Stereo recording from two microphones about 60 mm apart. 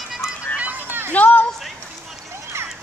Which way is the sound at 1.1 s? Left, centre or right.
Left.